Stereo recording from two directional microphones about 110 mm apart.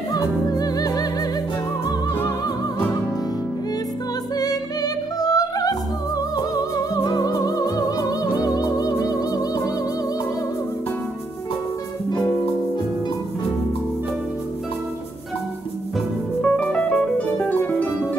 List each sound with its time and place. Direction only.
0.1 s music: 35° left (ahead or behind)
4.4 s music: 35° left (ahead or behind)
12.1 s music: 15° left (ahead or behind)
16.3 s music: 5° left (ahead or behind)